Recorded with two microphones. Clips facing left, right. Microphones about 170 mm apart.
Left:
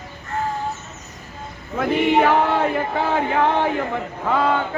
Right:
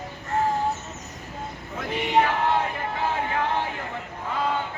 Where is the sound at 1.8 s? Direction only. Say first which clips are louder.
Left 6 dB; 90° left.